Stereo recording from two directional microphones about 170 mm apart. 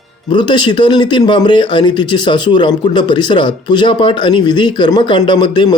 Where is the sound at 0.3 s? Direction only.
25° left (ahead or behind).